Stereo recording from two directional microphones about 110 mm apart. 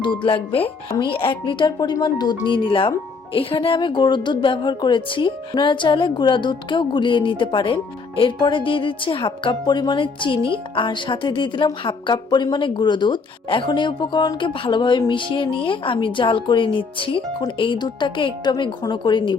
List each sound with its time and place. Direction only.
0.0 s a woman's voice: 50° left (ahead or behind)
2.5 s a woman's voice: 50° left (ahead or behind)